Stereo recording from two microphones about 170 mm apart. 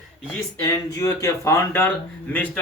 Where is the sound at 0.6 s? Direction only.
20° left (ahead or behind).